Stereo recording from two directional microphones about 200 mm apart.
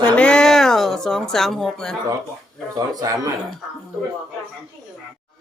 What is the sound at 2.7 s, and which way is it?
Speech, 20° right (ahead or behind).